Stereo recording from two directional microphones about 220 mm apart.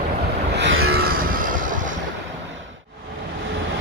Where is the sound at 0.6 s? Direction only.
55° right (ahead or behind); by 1.6 s 40° right (ahead or behind).